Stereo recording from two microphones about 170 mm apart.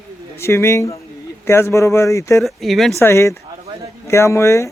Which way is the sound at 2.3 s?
Centre (ahead or behind).